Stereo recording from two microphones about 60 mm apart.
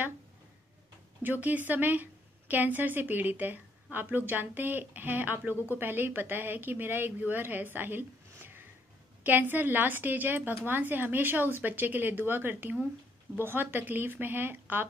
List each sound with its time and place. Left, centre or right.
1.2 s a woman's voice: right